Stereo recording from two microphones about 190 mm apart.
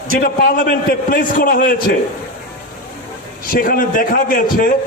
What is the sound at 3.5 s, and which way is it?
A man's voice, 50° left (ahead or behind).